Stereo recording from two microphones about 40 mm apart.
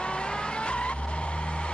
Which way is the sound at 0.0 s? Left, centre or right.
Left.